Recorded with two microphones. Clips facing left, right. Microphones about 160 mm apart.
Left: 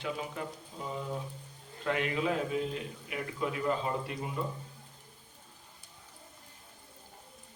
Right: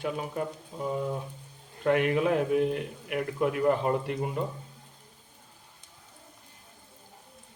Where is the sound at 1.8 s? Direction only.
55° right (ahead or behind).